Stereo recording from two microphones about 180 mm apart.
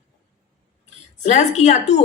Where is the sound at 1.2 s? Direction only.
40° left (ahead or behind).